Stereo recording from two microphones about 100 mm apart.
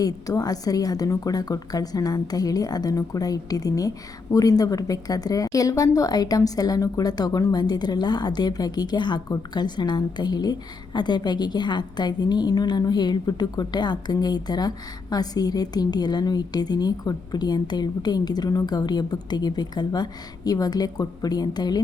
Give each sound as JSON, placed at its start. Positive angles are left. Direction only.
{"t": 0.0, "sound": "a woman's voice", "side_deg": 35}